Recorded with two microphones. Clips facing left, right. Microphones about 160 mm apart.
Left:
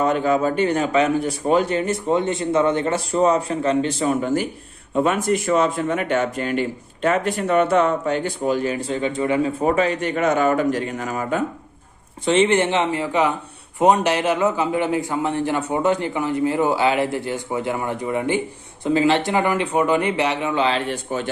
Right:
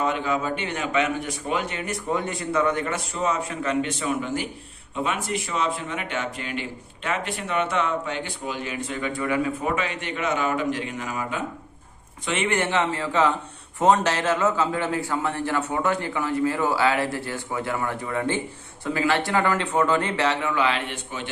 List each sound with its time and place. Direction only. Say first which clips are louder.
0.0 s speech: left 6 dB; 45° left (ahead or behind)
12.2 s a man's voice: left 8 dB; 30° left (ahead or behind)